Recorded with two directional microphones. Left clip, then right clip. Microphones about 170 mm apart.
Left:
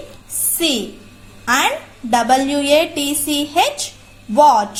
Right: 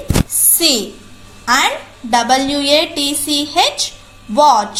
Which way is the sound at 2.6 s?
60° left (ahead or behind).